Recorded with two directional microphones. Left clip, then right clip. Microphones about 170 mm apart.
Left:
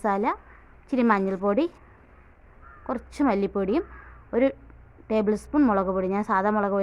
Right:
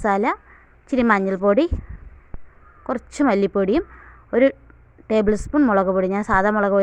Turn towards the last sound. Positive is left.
turn(degrees=-25)  # may be behind; listen again after turning